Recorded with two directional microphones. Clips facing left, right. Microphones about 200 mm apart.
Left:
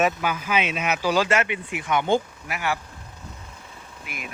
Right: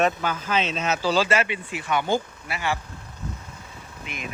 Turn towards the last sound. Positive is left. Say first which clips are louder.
# right 2 dB
turn(degrees=5)  # may be behind; listen again after turning